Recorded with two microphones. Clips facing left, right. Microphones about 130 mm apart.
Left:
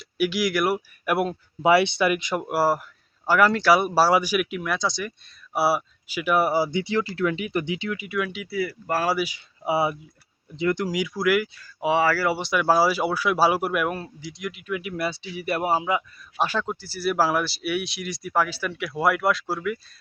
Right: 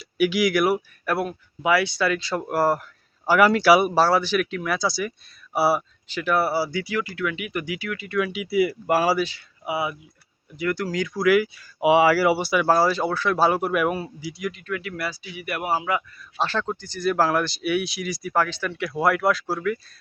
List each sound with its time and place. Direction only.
0.0 s speech: centre (ahead or behind)
1.0 s speech: 15° left (ahead or behind)
2.4 s speech: 5° left (ahead or behind)
3.2 s speech: 5° right (ahead or behind)
3.9 s speech: 10° left (ahead or behind)
4.6 s speech: centre (ahead or behind); by 8.2 s 15° left (ahead or behind)
8.2 s speech: 10° right (ahead or behind)
9.1 s speech: 10° left (ahead or behind)
9.6 s speech: 30° left (ahead or behind); by 14.5 s 5° right (ahead or behind)
14.5 s speech: 15° left (ahead or behind)